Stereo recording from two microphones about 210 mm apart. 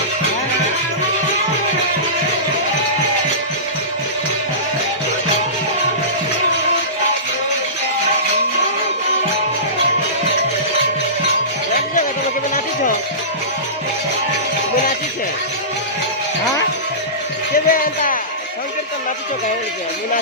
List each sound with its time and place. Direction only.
17.5 s music: 40° left (ahead or behind)